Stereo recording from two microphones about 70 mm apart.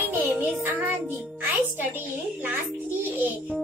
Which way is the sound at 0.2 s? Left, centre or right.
Right.